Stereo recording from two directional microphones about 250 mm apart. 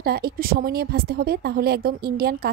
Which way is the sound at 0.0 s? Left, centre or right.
Right.